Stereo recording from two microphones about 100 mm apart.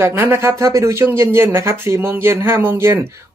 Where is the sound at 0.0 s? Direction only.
25° right (ahead or behind).